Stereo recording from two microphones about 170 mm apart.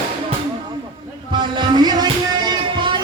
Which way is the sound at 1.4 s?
25° right (ahead or behind).